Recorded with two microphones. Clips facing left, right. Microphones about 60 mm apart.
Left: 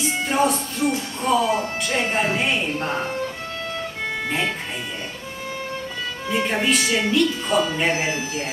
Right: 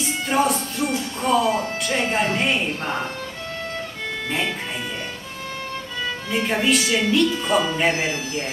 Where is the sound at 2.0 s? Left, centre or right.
Centre.